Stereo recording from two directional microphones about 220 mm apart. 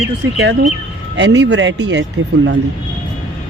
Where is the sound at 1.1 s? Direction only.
50° right (ahead or behind).